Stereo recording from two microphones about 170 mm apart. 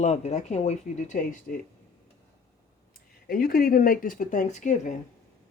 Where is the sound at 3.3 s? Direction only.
60° left (ahead or behind).